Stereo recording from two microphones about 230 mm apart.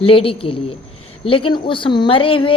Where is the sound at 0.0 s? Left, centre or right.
Left.